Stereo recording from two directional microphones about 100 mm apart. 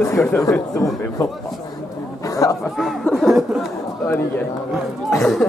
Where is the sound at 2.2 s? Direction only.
35° left (ahead or behind).